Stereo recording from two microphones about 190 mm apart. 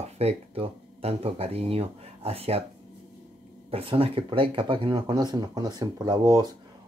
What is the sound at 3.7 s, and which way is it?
Speech, 30° right (ahead or behind).